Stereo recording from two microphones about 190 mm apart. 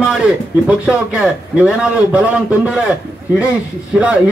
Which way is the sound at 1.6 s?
5° right (ahead or behind).